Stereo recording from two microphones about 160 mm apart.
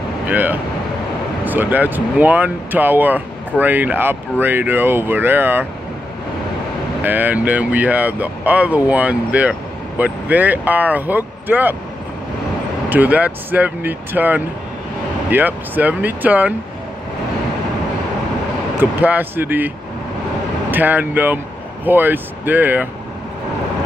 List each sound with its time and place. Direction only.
0.3 s speech: 10° right (ahead or behind)
7.1 s speech: 10° right (ahead or behind)
12.9 s speech: 10° right (ahead or behind)
18.8 s speech: 10° right (ahead or behind)
20.7 s speech: 10° right (ahead or behind)